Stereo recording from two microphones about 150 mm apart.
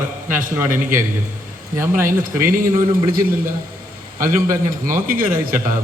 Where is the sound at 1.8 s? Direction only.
15° right (ahead or behind).